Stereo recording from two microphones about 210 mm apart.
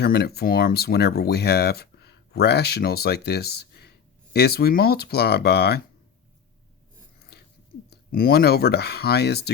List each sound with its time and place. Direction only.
0.0 s speech: 50° left (ahead or behind)
7.9 s speech: 45° left (ahead or behind)